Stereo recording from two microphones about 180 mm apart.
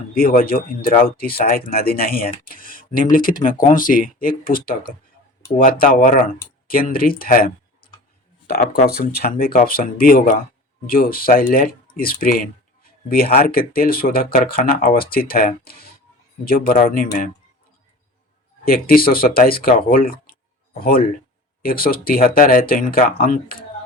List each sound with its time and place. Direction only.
0.1 s speech: 55° left (ahead or behind)
18.6 s speech: 55° left (ahead or behind)